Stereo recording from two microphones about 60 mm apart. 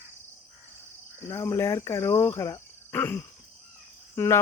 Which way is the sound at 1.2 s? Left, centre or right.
Left.